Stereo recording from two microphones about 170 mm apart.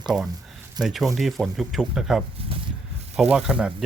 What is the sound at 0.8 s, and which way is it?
Speech, centre (ahead or behind).